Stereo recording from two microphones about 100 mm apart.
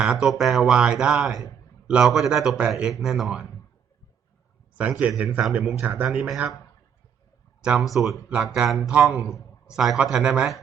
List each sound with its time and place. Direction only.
0.0 s speech: 5° right (ahead or behind)
4.8 s speech: 15° right (ahead or behind)
6.1 s speech: 5° right (ahead or behind)
7.6 s speech: 10° right (ahead or behind)